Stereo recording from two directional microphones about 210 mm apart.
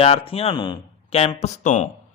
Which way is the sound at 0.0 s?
25° left (ahead or behind).